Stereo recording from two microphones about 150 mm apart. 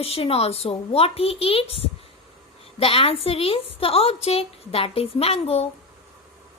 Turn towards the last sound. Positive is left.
turn(degrees=40)  # may be behind; listen again after turning